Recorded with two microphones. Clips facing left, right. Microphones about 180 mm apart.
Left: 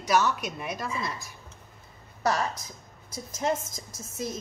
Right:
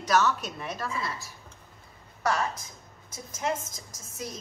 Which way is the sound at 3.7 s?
30° left (ahead or behind).